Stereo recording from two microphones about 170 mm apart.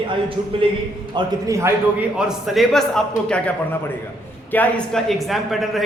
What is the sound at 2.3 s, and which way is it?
Speech, centre (ahead or behind).